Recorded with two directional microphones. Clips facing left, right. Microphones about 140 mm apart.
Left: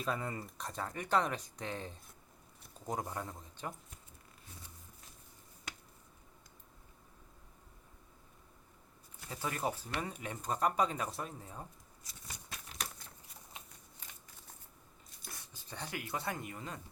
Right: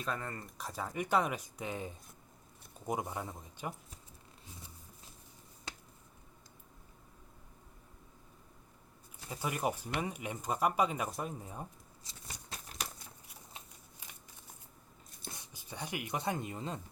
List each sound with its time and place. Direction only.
0.0 s speech: 10° left (ahead or behind)
0.4 s speech: 5° right (ahead or behind)
9.3 s speech: 15° right (ahead or behind)
15.2 s speech: 20° right (ahead or behind)